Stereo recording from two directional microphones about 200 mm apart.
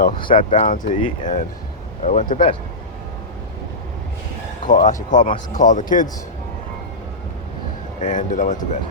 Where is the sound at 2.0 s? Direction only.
40° left (ahead or behind).